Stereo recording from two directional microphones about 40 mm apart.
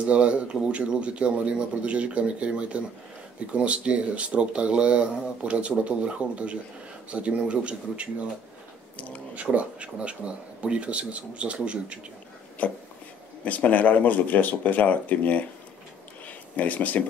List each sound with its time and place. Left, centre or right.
0.0 s speech: right
8.9 s speech: left
9.3 s speech: right
12.6 s speech: left
16.3 s a sound: left